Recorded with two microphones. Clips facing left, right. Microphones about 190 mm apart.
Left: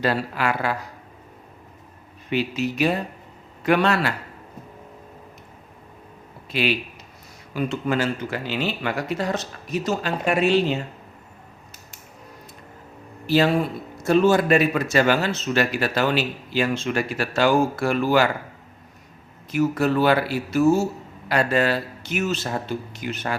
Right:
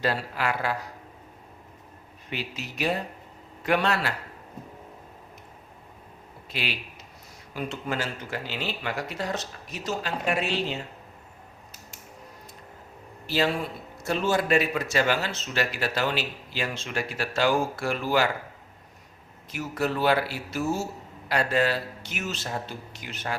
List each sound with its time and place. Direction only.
0.0 s speech: 75° left (ahead or behind)
2.3 s speech: 70° left (ahead or behind)
6.5 s speech: 65° left (ahead or behind)
7.5 s speech: 80° left
9.8 s speech: 60° left (ahead or behind)
13.2 s speech: 55° left (ahead or behind)
19.5 s speech: 60° left (ahead or behind)